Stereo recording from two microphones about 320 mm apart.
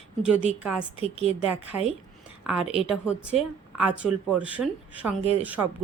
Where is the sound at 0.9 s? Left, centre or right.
Centre.